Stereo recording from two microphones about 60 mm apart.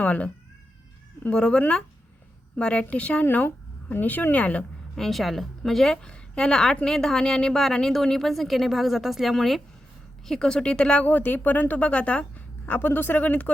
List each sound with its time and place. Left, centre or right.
0.0 s speech: left
1.3 s a woman's voice: centre
4.9 s a woman's voice: centre; by 12.2 s left
12.6 s speech: left